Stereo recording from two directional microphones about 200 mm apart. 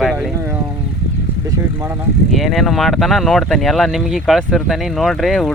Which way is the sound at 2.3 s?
Centre (ahead or behind).